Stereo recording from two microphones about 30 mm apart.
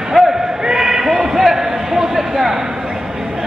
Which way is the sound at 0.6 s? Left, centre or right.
Right.